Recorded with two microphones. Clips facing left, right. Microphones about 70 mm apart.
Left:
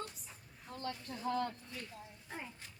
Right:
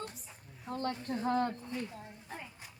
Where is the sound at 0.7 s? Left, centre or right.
Right.